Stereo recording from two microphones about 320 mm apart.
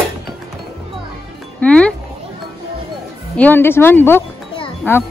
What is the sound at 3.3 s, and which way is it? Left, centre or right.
Speech, centre.